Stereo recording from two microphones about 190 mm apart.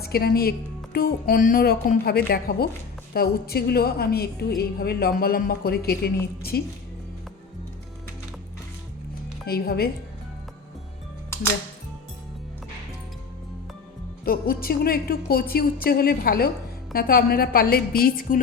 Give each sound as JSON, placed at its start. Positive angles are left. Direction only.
{"t": 0.0, "sound": "a woman's voice", "side_deg": 55}
{"t": 9.5, "sound": "a woman's voice", "side_deg": 55}
{"t": 14.3, "sound": "speech", "side_deg": 50}